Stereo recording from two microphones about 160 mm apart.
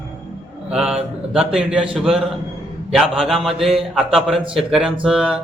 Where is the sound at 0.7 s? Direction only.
5° right (ahead or behind).